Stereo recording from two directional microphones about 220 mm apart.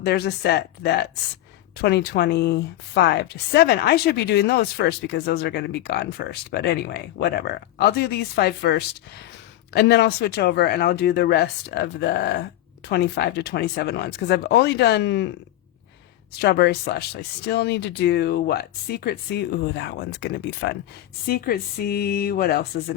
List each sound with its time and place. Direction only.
0.0 s a woman's voice: 45° left (ahead or behind)
16.4 s a woman's voice: 45° left (ahead or behind)